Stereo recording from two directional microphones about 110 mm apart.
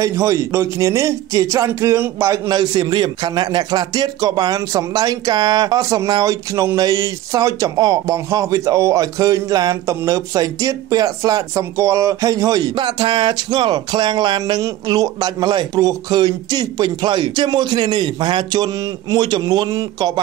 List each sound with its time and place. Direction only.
0.0 s speech: 25° right (ahead or behind)